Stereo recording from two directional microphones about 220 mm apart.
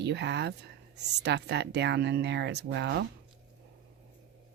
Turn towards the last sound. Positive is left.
turn(degrees=-50)  # may be behind; listen again after turning